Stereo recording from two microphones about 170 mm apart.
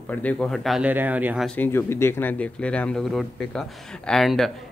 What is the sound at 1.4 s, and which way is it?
Speech, 10° left (ahead or behind).